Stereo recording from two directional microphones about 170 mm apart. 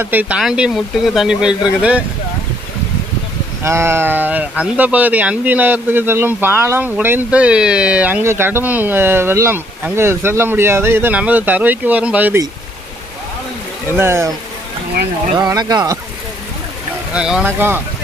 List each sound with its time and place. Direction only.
0.0 s speech: 10° right (ahead or behind)
3.6 s speech: 15° right (ahead or behind)
13.9 s speech: 15° right (ahead or behind)
15.3 s speech: 25° right (ahead or behind)
17.1 s speech: 5° right (ahead or behind)